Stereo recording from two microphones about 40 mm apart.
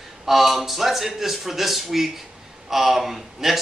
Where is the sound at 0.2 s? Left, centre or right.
Centre.